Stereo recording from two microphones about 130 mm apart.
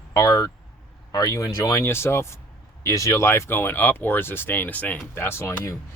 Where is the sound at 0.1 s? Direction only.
25° left (ahead or behind).